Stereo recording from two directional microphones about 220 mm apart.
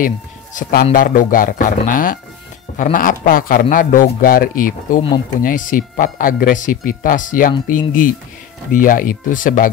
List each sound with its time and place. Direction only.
0.6 s speech: 40° left (ahead or behind)